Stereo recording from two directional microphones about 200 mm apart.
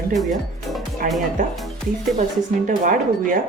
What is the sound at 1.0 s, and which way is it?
Speech, 40° right (ahead or behind).